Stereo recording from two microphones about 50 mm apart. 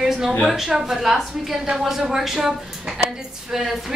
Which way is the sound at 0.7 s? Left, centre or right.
Centre.